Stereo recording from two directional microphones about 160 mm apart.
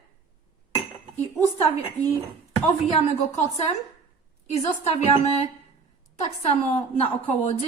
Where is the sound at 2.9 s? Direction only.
40° left (ahead or behind).